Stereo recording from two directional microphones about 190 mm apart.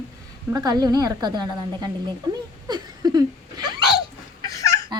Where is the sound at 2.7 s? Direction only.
20° right (ahead or behind).